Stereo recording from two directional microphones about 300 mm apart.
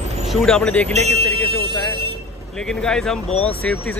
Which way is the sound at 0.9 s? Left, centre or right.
Right.